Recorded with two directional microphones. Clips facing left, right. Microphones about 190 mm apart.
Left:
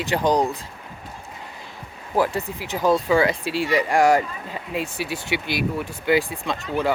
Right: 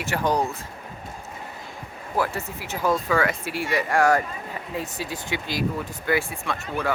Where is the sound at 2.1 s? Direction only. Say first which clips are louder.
Left 4 dB; 15° left (ahead or behind).